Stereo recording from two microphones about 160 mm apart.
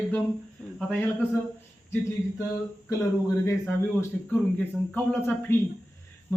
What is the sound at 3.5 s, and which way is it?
A man's voice, 15° left (ahead or behind).